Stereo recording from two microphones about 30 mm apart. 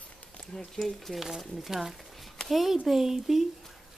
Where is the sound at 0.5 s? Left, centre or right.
Centre.